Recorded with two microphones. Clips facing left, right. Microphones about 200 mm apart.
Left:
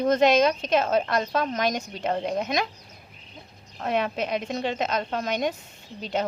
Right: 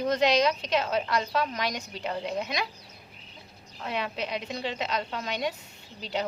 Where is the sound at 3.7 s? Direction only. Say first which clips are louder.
Left 6 dB; 50° left (ahead or behind).